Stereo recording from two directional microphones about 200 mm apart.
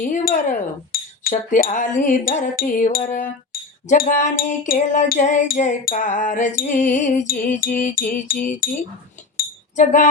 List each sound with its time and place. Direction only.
0.0 s speech: 40° left (ahead or behind)
7.8 s music: 40° left (ahead or behind)
9.4 s chink: 40° left (ahead or behind)